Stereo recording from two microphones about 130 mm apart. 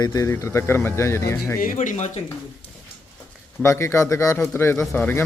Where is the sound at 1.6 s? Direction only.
85° left; by 2.2 s 65° left (ahead or behind).